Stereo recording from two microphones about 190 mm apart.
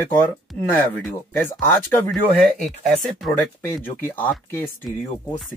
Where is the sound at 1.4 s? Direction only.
10° left (ahead or behind).